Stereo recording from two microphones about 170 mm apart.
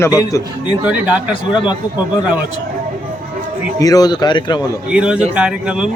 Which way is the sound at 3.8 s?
20° left (ahead or behind).